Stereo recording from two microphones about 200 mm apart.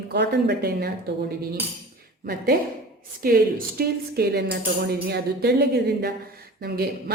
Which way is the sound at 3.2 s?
45° right (ahead or behind).